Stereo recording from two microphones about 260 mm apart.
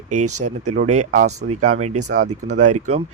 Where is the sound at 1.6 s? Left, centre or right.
Right.